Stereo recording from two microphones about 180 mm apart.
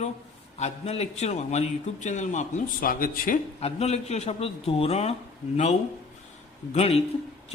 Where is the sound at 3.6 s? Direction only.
35° left (ahead or behind).